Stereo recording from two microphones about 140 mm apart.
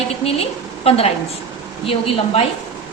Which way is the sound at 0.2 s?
45° left (ahead or behind).